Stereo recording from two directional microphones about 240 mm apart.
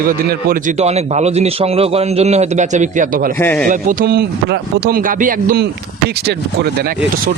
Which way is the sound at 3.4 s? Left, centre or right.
Centre.